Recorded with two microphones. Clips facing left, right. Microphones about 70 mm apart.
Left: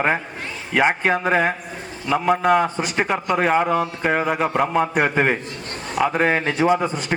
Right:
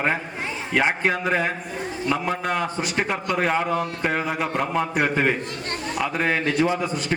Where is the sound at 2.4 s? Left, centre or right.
Left.